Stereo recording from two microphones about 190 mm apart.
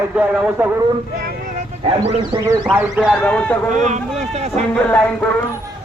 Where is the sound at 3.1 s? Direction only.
5° left (ahead or behind).